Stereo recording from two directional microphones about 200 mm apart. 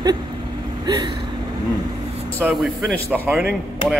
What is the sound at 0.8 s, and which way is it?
Vehicle, 20° right (ahead or behind).